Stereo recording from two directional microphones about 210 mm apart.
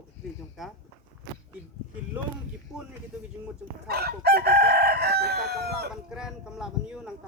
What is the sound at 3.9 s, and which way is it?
Chicken, 50° right (ahead or behind).